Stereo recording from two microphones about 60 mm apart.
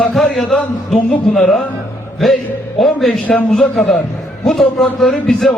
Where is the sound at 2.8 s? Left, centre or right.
Centre.